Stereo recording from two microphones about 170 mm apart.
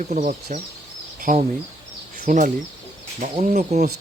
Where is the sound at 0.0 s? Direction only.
40° right (ahead or behind).